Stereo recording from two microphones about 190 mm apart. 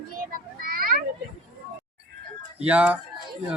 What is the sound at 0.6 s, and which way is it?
Children playing, 50° right (ahead or behind).